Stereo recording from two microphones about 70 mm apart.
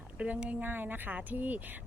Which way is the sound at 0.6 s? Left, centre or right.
Right.